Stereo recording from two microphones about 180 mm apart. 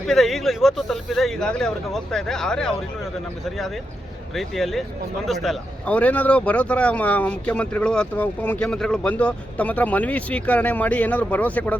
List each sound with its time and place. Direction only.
0.0 s speech: centre (ahead or behind)
4.4 s speech: centre (ahead or behind)